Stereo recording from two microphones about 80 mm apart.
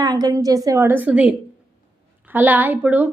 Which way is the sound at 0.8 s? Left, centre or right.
Right.